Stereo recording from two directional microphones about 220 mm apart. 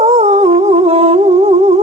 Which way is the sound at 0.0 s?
30° right (ahead or behind).